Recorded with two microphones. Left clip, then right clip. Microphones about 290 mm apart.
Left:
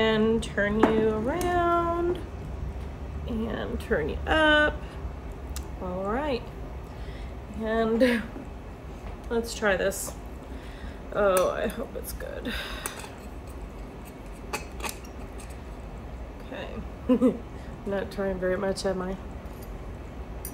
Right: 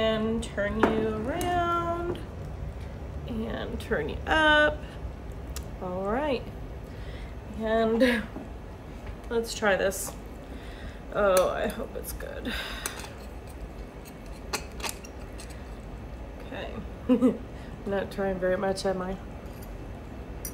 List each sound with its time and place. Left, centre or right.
0.0 s speech: left; by 2.2 s centre
3.3 s speech: centre
6.0 s speech: centre
7.6 s speech: centre
9.3 s speech: centre
11.1 s speech: centre
14.5 s mechanisms: centre
17.1 s speech: centre